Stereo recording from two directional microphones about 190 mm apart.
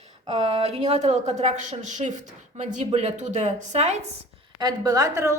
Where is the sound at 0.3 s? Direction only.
30° right (ahead or behind).